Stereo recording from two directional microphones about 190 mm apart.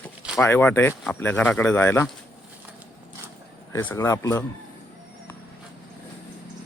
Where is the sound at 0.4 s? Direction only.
10° left (ahead or behind).